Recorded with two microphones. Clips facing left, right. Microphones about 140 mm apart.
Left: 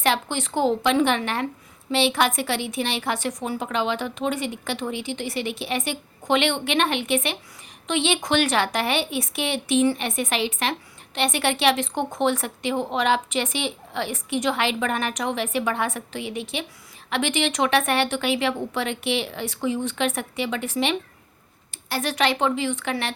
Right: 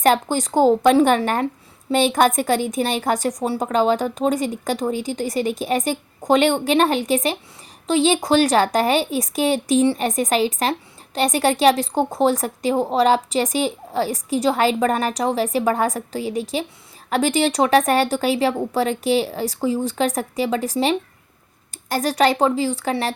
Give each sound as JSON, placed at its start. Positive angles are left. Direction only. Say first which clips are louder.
{"t": 0.0, "sound": "a woman's voice", "louder": "right 6 dB", "side_deg": -40}